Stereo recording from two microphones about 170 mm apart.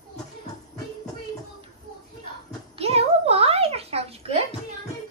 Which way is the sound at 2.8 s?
35° right (ahead or behind).